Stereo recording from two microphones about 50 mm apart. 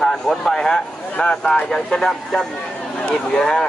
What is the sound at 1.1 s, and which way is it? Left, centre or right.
Speech, left.